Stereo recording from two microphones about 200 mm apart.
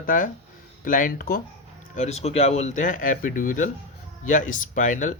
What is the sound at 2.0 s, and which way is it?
Speech, 35° left (ahead or behind).